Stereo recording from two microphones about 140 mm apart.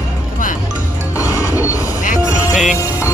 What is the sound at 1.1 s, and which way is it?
Music, 20° left (ahead or behind).